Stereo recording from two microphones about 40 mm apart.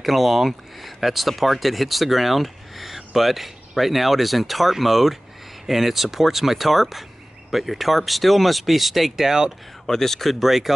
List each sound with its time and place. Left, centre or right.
0.0 s speech: centre
9.8 s speech: centre
10.4 s speech: centre